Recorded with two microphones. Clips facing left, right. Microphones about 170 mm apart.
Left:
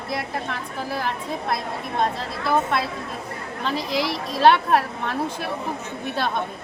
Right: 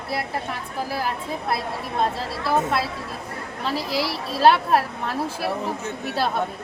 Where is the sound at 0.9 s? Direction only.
5° right (ahead or behind).